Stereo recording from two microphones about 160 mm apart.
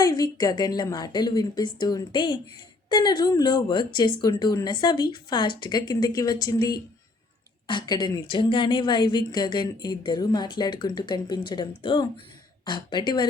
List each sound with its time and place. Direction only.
0.0 s a woman's voice: 25° left (ahead or behind)